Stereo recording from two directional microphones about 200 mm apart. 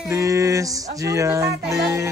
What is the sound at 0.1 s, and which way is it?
Music, 15° right (ahead or behind).